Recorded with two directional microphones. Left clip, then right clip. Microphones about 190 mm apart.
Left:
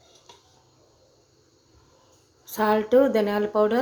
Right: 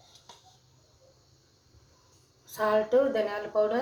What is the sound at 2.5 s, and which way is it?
Speech, 45° left (ahead or behind).